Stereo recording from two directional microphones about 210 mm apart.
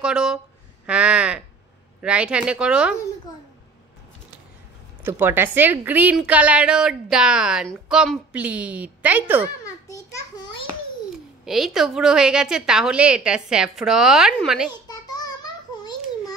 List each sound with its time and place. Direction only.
0.0 s a woman's voice: 5° right (ahead or behind)
5.0 s a woman's voice: 10° right (ahead or behind)
9.7 s a sound: 15° left (ahead or behind)
11.4 s a woman's voice: centre (ahead or behind)
14.7 s babbling: 20° left (ahead or behind)